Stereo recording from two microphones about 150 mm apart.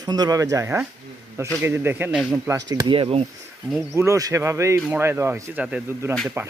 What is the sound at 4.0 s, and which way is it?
A man's voice, 20° right (ahead or behind).